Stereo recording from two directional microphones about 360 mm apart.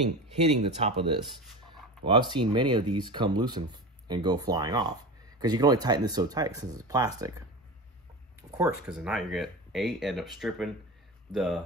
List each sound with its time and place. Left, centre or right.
0.4 s speech: centre
8.5 s speech: centre